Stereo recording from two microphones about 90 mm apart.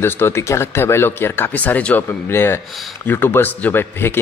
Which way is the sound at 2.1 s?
25° left (ahead or behind).